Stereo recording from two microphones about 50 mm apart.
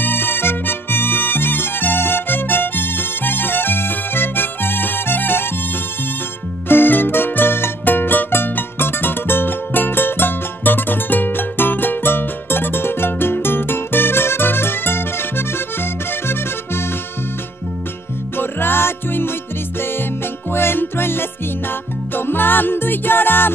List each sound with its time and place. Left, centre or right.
0.0 s music: left
6.7 s music: left
18.4 s music: left
20.5 s music: left